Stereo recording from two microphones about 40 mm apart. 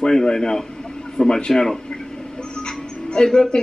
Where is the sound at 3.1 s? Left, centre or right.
Left.